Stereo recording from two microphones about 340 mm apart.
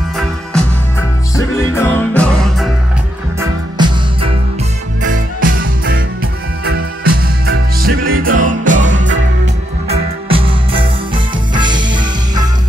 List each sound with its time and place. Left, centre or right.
1.7 s music: centre
3.3 s music: centre
5.0 s music: right
10.2 s music: centre